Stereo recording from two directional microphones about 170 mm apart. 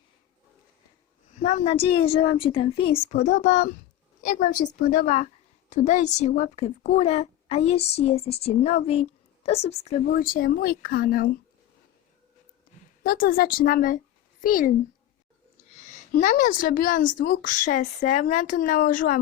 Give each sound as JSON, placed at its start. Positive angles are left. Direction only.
{"t": 1.3, "sound": "a woman's voice", "side_deg": 45}
{"t": 10.1, "sound": "speech", "side_deg": 55}
{"t": 13.0, "sound": "speech", "side_deg": 60}
{"t": 16.2, "sound": "a woman's voice", "side_deg": 50}